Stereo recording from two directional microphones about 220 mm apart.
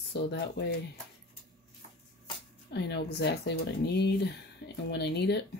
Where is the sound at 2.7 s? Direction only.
50° left (ahead or behind).